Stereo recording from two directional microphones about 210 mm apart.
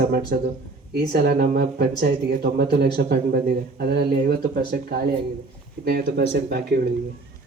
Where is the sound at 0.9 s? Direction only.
50° right (ahead or behind).